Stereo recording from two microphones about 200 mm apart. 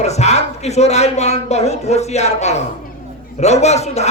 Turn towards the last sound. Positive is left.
turn(degrees=35)  # may be behind; listen again after turning